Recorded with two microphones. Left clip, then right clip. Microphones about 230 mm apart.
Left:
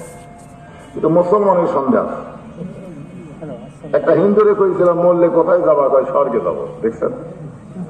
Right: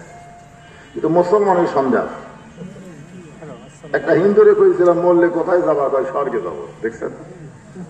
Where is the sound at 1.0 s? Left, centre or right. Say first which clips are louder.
Left 2 dB; right.